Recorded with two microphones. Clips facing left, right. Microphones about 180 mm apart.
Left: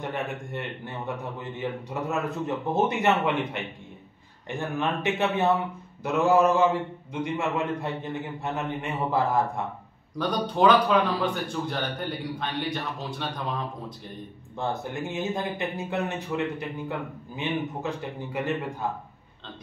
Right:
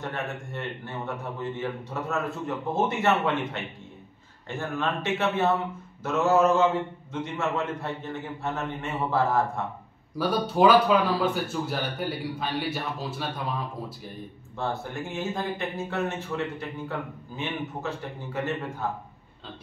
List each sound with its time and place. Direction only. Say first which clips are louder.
0.0 s a man's voice: left 2 dB; 15° left (ahead or behind)
10.1 s a man's voice: right 2 dB; 5° right (ahead or behind)
14.6 s a man's voice: left 1 dB; 20° left (ahead or behind)